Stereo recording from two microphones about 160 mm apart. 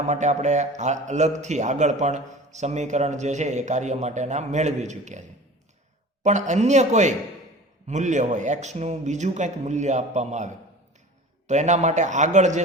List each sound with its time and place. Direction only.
0.1 s a man's voice: 45° right (ahead or behind)
6.2 s a man's voice: 45° right (ahead or behind)